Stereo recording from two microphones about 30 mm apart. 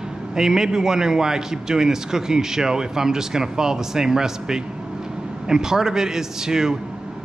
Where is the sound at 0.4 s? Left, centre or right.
Centre.